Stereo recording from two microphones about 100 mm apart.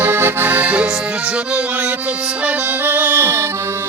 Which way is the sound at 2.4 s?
15° right (ahead or behind).